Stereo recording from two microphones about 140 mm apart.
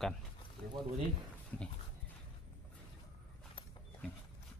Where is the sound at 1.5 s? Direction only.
10° left (ahead or behind).